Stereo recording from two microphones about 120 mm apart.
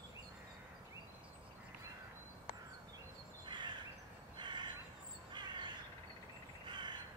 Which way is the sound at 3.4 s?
40° right (ahead or behind).